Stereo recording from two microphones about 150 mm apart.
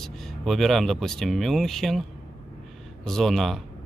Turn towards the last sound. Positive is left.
turn(degrees=0)  # may be behind; listen again after turning